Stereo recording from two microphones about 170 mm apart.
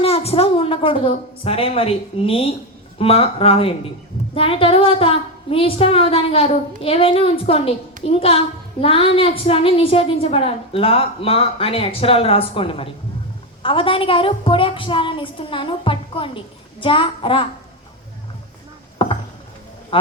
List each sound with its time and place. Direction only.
0.0 s a woman's voice: 35° left (ahead or behind)
19.0 s a sound: 30° left (ahead or behind)
19.9 s speech: 30° left (ahead or behind)